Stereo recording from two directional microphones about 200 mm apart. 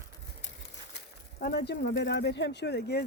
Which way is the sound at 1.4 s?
55° left (ahead or behind).